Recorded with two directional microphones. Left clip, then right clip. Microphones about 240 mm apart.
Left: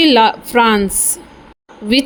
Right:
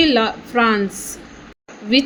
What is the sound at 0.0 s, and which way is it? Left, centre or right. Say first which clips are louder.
Speech: left 6 dB; left.